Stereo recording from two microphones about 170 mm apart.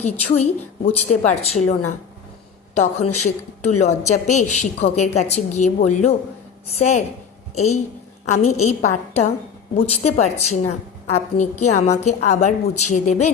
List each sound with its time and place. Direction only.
0.0 s a woman's voice: 40° left (ahead or behind)